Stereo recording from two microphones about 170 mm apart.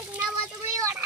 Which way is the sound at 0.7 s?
15° right (ahead or behind).